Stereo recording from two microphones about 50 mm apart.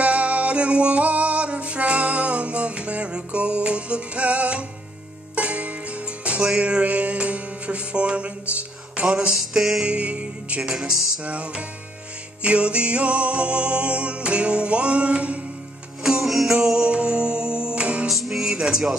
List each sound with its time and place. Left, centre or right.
0.0 s music: right
9.3 s music: centre
9.8 s music: right
10.7 s music: centre
11.2 s music: right
16.0 s music: centre
16.6 s music: centre
18.0 s music: centre